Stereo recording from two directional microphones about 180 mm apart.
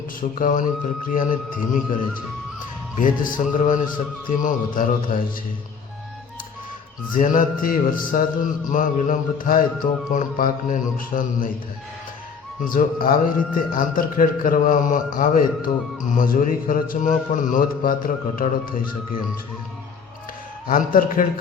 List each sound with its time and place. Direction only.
0.2 s a man's voice: 50° left (ahead or behind)
3.0 s a man's voice: 50° left (ahead or behind)
7.1 s a man's voice: 50° left (ahead or behind)
12.6 s a man's voice: 50° left (ahead or behind)
20.7 s a man's voice: 50° left (ahead or behind)